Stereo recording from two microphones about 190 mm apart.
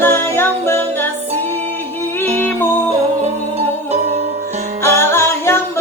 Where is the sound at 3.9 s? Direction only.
35° right (ahead or behind).